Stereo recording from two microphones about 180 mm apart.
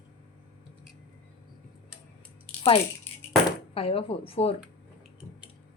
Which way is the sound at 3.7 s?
30° left (ahead or behind).